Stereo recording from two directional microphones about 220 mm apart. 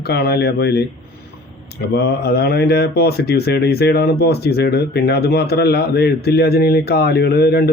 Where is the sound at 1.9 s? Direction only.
45° left (ahead or behind).